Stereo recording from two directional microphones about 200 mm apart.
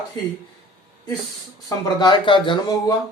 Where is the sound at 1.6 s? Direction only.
20° left (ahead or behind).